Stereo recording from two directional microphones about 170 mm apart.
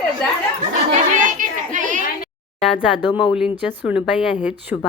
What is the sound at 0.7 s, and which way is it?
Chatter, 45° right (ahead or behind).